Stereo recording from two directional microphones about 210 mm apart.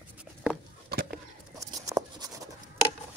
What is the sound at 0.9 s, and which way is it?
Bird, 50° right (ahead or behind).